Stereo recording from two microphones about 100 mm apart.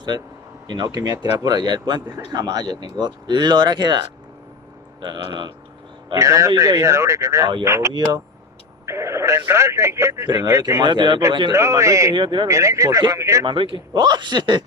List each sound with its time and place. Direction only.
0.7 s speech: 45° right (ahead or behind)
6.1 s speech: 30° right (ahead or behind)
10.2 s speech: 45° right (ahead or behind)
11.5 s speech: 30° right (ahead or behind)
12.1 s speech: 50° right (ahead or behind)
12.4 s speech: 30° right (ahead or behind)
13.5 s speech: 55° right (ahead or behind)